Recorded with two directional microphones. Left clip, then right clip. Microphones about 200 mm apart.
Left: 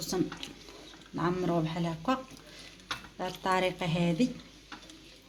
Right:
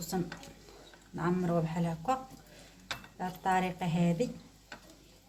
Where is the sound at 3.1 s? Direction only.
25° left (ahead or behind).